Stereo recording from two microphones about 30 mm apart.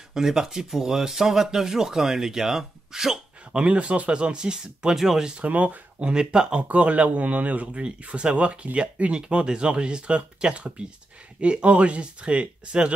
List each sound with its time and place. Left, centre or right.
0.1 s speech: centre
3.5 s speech: right
4.9 s speech: centre
5.4 s speech: right
5.9 s speech: right
6.7 s speech: right
7.6 s speech: right
9.1 s speech: right